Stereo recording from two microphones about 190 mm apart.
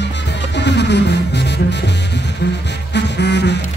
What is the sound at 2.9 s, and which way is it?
Saxophone, 65° left (ahead or behind).